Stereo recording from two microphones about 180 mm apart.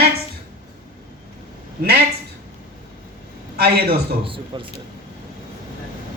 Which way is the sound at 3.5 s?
60° right (ahead or behind).